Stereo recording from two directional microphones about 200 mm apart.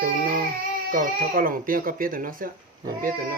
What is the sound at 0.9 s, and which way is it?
Speech, 45° right (ahead or behind).